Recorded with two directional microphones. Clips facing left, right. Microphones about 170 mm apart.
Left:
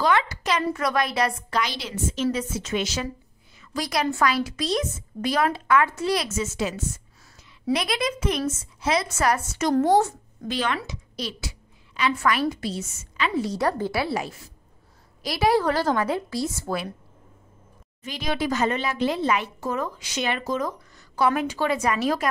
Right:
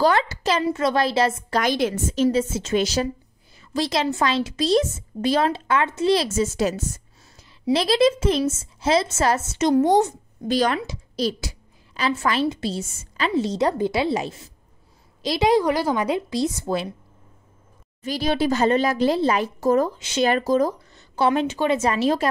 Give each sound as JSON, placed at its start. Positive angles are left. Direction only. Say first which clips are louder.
{"t": 0.0, "sound": "a woman's voice", "louder": "right 3 dB", "side_deg": -35}
{"t": 1.6, "sound": "a woman's voice", "louder": "right 7 dB", "side_deg": -50}
{"t": 2.2, "sound": "a woman's voice", "louder": "right 7 dB", "side_deg": -25}
{"t": 3.7, "sound": "a woman's voice", "louder": "right 3 dB", "side_deg": -25}
{"t": 7.7, "sound": "a woman's voice", "louder": "right 7 dB", "side_deg": -30}
{"t": 10.5, "sound": "a woman's voice", "louder": "right 6 dB", "side_deg": -40}
{"t": 12.0, "sound": "a woman's voice", "louder": "right 1 dB", "side_deg": -25}
{"t": 13.5, "sound": "a woman's voice", "louder": "right 3 dB", "side_deg": -20}
{"t": 18.0, "sound": "a woman's voice", "louder": "right 5 dB", "side_deg": -35}
{"t": 20.0, "sound": "a woman's voice", "louder": "right 8 dB", "side_deg": -25}
{"t": 20.2, "sound": "a woman's voice", "louder": "right 7 dB", "side_deg": -35}